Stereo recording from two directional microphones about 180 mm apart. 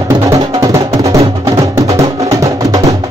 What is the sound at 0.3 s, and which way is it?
Music, 15° right (ahead or behind).